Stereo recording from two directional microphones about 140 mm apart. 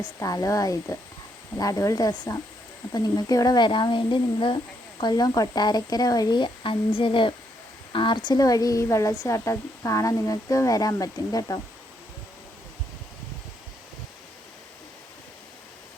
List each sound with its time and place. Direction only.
0.0 s a woman's voice: 25° left (ahead or behind)